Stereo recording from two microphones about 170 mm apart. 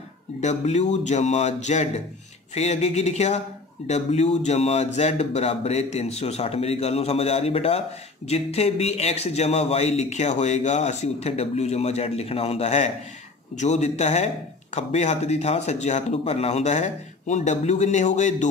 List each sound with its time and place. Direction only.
0.4 s speech: 40° left (ahead or behind)